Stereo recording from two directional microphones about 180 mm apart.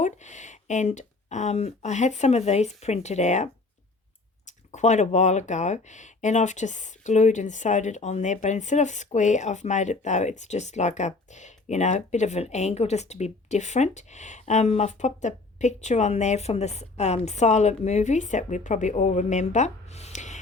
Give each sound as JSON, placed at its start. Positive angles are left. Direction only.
{"t": 0.0, "sound": "speech", "side_deg": 40}